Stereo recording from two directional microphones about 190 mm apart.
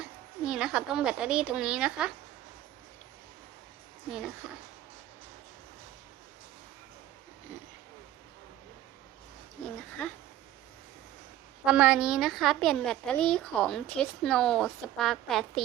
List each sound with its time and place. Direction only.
0.0 s a woman's voice: 5° right (ahead or behind)
4.4 s a woman's voice: 5° right (ahead or behind)
9.6 s a woman's voice: 5° left (ahead or behind)
11.6 s a woman's voice: 5° right (ahead or behind)